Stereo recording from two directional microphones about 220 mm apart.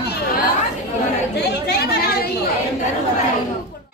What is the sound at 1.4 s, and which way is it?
Chatter, 50° left (ahead or behind).